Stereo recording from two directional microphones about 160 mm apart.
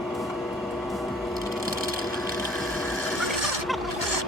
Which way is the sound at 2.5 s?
Centre (ahead or behind).